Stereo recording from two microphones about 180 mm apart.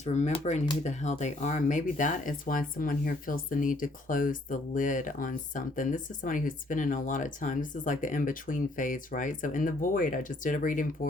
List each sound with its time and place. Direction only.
0.0 s speech: 40° left (ahead or behind)